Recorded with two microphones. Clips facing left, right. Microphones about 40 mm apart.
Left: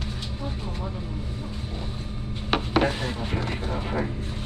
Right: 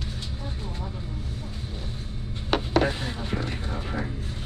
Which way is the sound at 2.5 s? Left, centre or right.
Centre.